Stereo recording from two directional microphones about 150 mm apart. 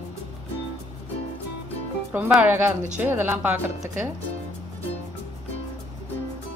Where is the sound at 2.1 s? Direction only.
10° right (ahead or behind).